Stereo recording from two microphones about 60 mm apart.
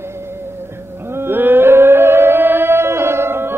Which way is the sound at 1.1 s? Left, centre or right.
Right.